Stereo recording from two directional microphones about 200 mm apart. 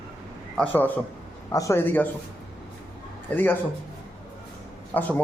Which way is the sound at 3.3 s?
10° left (ahead or behind).